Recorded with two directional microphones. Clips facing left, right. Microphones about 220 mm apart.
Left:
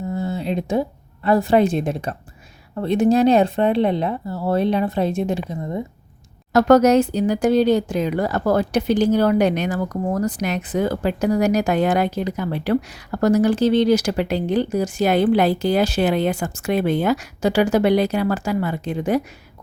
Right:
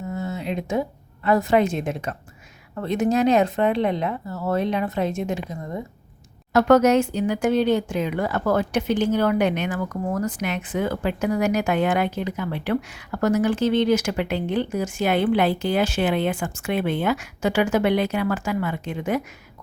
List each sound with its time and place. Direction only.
0.1 s a woman's voice: 35° left (ahead or behind)
6.5 s speech: 40° left (ahead or behind)